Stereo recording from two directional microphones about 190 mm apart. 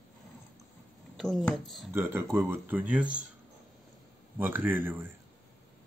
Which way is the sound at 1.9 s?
10° right (ahead or behind).